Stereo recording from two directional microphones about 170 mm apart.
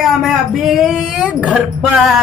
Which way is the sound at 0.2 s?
Centre (ahead or behind).